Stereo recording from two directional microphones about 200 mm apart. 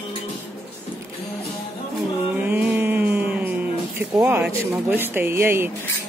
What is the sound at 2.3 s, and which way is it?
Speech, 10° right (ahead or behind).